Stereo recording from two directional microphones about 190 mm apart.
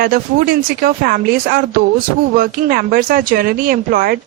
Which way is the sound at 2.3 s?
50° right (ahead or behind).